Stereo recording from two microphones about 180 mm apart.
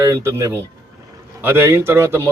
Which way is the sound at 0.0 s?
15° right (ahead or behind).